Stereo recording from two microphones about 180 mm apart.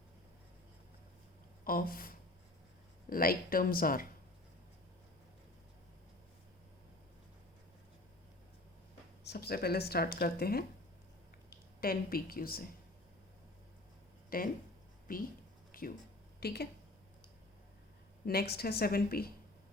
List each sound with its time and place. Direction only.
1.6 s a sound: 50° left (ahead or behind)
3.1 s speech: 55° left (ahead or behind)
9.2 s a woman's voice: 65° left (ahead or behind)
11.8 s a woman's voice: 55° left (ahead or behind)
14.3 s speech: 50° left (ahead or behind)
15.7 s a sound: 50° left (ahead or behind)
16.4 s a woman's voice: 60° left (ahead or behind)
18.3 s a woman's voice: 60° left (ahead or behind)